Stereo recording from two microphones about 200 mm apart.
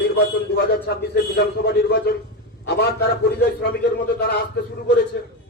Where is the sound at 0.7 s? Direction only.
55° left (ahead or behind).